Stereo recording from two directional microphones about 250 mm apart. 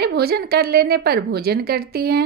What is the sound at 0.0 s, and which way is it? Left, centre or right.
Speech, right.